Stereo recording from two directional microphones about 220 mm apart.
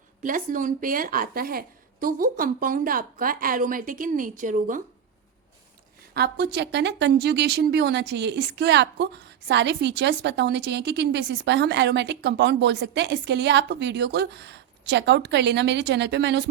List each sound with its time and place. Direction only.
0.2 s a woman's voice: 40° right (ahead or behind)
6.1 s speech: 50° right (ahead or behind)